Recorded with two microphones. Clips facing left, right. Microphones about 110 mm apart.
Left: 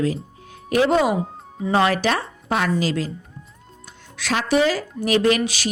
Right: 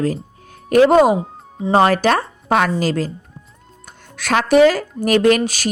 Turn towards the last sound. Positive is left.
turn(degrees=-45)  # may be behind; listen again after turning